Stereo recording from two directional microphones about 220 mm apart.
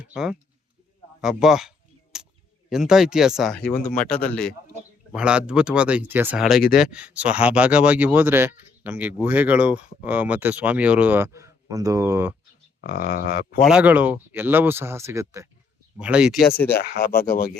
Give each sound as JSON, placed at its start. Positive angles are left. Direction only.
{"t": 0.1, "sound": "speech", "side_deg": -5}
{"t": 2.1, "sound": "a sound", "side_deg": -5}
{"t": 2.6, "sound": "speech", "side_deg": 0}
{"t": 6.6, "sound": "speech", "side_deg": 40}
{"t": 6.9, "sound": "speech", "side_deg": -5}
{"t": 12.8, "sound": "speech", "side_deg": 40}
{"t": 13.7, "sound": "speech", "side_deg": -5}
{"t": 16.4, "sound": "speech", "side_deg": 10}
{"t": 16.7, "sound": "speech", "side_deg": 45}